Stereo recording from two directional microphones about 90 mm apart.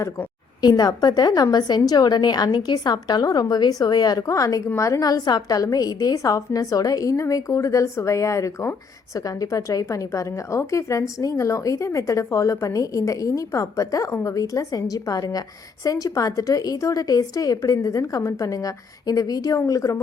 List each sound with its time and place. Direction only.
0.6 s a woman's voice: 50° left (ahead or behind)